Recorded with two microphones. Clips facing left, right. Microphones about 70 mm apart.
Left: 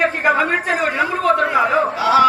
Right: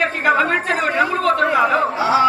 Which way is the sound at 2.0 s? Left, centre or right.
Right.